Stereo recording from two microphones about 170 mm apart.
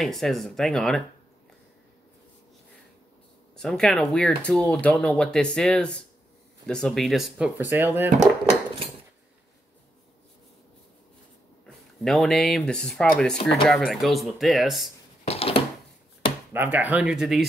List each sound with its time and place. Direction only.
0.0 s speech: centre (ahead or behind)
3.5 s speech: 5° left (ahead or behind); by 8.1 s 15° right (ahead or behind)
11.6 s speech: centre (ahead or behind)
15.2 s a sound: 35° left (ahead or behind)
16.5 s speech: 10° right (ahead or behind)